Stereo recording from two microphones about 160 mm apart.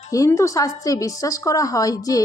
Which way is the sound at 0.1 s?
20° left (ahead or behind).